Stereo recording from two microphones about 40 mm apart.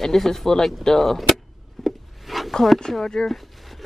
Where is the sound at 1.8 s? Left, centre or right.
Centre.